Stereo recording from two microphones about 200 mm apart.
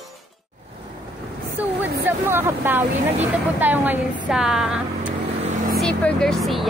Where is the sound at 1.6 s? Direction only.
10° right (ahead or behind).